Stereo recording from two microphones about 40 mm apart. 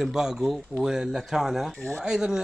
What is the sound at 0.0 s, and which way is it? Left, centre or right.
Speech, centre.